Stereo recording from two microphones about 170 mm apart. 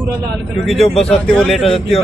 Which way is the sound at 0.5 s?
Centre (ahead or behind).